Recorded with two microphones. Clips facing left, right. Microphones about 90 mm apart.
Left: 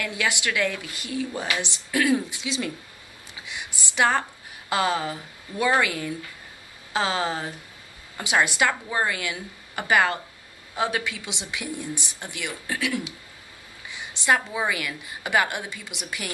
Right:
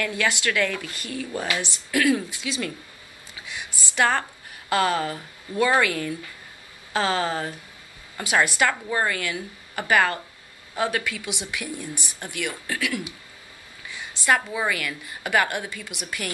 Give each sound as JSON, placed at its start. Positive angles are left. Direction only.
{"t": 0.0, "sound": "speech", "side_deg": 15}
{"t": 14.2, "sound": "speech", "side_deg": 20}